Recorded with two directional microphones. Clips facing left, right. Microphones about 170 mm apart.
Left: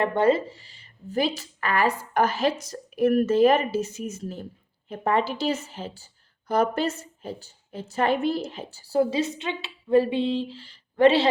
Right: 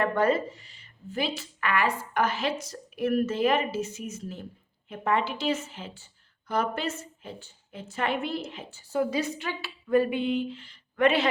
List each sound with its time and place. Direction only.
0.0 s a woman's voice: 25° left (ahead or behind)